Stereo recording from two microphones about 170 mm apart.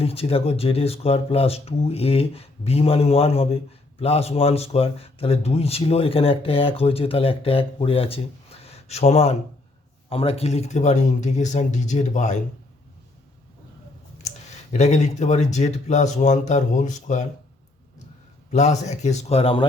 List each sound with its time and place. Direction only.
0.0 s speech: 35° left (ahead or behind)
14.2 s speech: 40° left (ahead or behind)
18.5 s speech: 40° left (ahead or behind)